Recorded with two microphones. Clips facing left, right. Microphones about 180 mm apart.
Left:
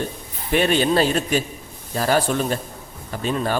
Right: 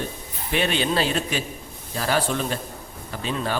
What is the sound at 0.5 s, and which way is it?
A man's voice, 45° left (ahead or behind).